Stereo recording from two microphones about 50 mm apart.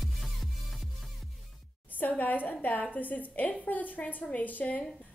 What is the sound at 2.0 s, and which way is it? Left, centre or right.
A woman's voice, left.